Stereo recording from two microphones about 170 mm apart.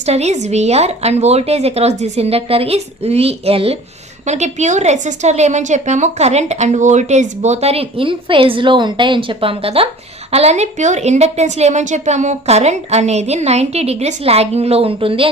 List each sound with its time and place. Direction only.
0.0 s a woman's voice: 40° right (ahead or behind)